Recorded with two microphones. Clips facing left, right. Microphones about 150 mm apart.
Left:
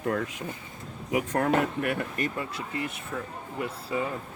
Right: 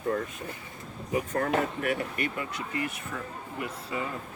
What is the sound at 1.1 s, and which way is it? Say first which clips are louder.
Speech: left 2 dB; 90° left.